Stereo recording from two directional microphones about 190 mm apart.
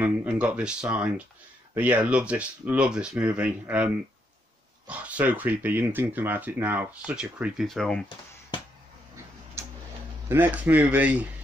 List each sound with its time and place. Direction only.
0.0 s speech: 10° right (ahead or behind)
9.6 s tick-tock: 15° right (ahead or behind)
10.2 s speech: 10° right (ahead or behind)